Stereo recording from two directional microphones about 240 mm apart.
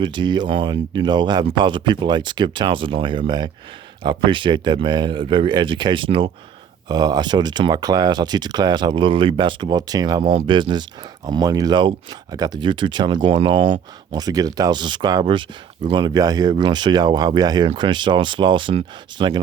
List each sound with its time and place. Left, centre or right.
0.0 s speech: centre